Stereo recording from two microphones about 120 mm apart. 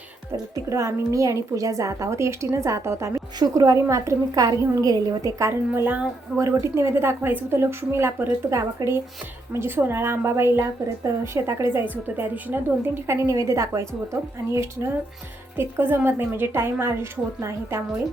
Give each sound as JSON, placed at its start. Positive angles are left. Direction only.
{"t": 0.5, "sound": "a woman's voice", "side_deg": -25}